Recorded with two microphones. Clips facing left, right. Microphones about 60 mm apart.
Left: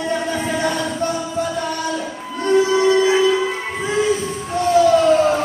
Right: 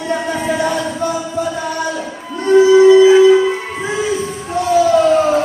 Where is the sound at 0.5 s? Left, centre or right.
Right.